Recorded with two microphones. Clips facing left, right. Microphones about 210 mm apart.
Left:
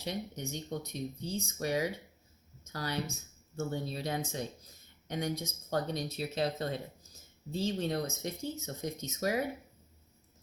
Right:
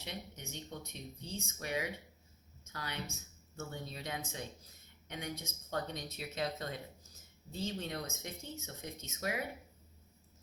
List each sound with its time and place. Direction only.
0.0 s speech: 40° left (ahead or behind)